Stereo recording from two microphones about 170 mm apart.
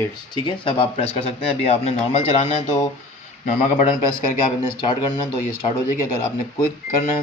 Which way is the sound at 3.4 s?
45° left (ahead or behind).